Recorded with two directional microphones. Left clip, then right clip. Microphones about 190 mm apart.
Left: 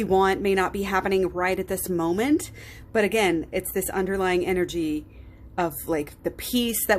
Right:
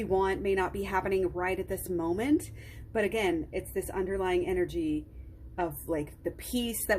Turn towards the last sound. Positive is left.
turn(degrees=20)  # may be behind; listen again after turning